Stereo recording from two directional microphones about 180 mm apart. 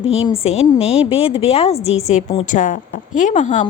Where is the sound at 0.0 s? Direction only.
35° left (ahead or behind).